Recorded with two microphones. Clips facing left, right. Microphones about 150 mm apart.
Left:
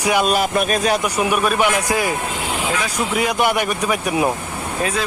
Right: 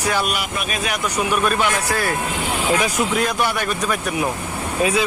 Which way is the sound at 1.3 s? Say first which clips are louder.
Left 1 dB; 10° left (ahead or behind).